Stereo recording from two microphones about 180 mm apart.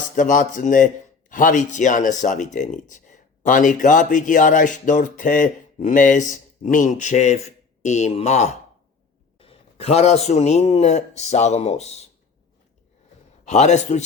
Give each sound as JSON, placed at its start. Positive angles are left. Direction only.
{"t": 0.2, "sound": "a man's voice", "side_deg": 45}
{"t": 13.4, "sound": "a man's voice", "side_deg": 40}